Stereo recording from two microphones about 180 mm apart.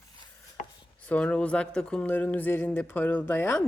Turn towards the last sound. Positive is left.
turn(degrees=10)  # may be behind; listen again after turning